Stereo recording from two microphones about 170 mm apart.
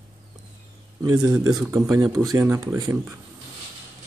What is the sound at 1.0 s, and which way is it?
Speech, 20° right (ahead or behind).